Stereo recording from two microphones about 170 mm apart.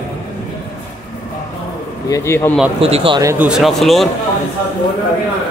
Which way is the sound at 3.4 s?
Centre (ahead or behind).